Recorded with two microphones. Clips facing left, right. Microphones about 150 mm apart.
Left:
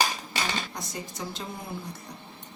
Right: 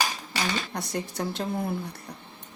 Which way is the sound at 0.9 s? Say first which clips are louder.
Right 8 dB; 65° right (ahead or behind).